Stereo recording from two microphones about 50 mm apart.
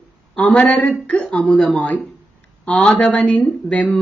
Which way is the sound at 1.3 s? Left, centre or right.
Left.